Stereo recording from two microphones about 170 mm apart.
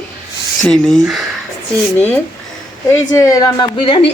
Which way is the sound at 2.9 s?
15° left (ahead or behind).